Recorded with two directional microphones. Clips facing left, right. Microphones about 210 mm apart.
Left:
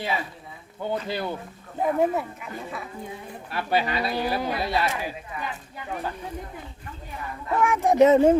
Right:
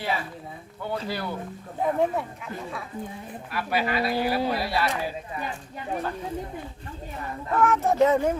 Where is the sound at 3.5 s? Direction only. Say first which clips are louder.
Left 1 dB; 25° left (ahead or behind).